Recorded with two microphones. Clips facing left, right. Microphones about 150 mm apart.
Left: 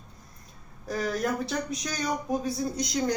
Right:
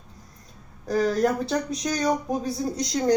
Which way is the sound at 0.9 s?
35° right (ahead or behind).